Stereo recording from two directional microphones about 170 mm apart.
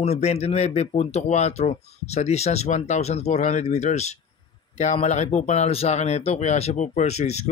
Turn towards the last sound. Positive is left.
turn(degrees=40)  # may be behind; listen again after turning